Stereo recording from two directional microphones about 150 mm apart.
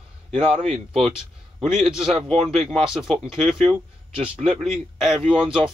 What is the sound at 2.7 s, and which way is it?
Speech, 5° right (ahead or behind).